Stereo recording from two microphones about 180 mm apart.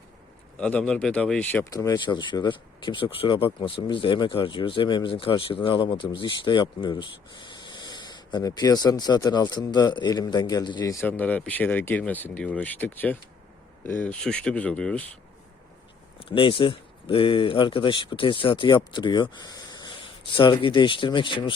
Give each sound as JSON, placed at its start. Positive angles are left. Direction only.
{"t": 0.6, "sound": "speech", "side_deg": 5}
{"t": 1.7, "sound": "speech", "side_deg": 20}
{"t": 11.0, "sound": "speech", "side_deg": 10}
{"t": 16.3, "sound": "speech", "side_deg": 30}